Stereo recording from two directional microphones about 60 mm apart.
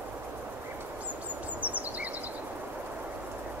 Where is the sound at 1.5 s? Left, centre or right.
Right.